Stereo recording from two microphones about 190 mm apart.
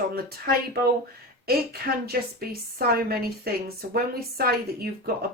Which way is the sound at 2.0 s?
55° right (ahead or behind).